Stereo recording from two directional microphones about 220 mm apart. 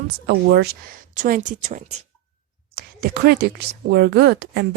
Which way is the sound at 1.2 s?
40° right (ahead or behind).